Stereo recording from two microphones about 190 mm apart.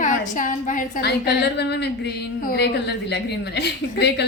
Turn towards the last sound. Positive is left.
turn(degrees=60)  # may be behind; listen again after turning